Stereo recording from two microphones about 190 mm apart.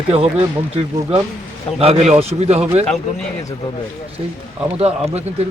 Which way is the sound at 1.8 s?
30° right (ahead or behind).